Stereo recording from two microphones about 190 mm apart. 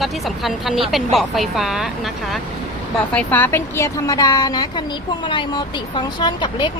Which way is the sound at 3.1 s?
10° left (ahead or behind).